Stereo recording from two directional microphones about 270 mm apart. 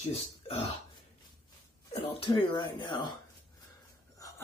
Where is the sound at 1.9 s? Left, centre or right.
Centre.